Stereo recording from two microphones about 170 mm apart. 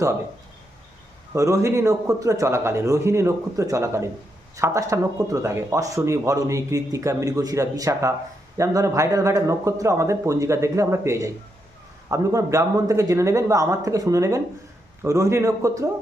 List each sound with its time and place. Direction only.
1.3 s speech: 20° right (ahead or behind)